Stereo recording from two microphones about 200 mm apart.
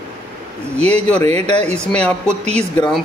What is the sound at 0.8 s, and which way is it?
Speech, 30° right (ahead or behind).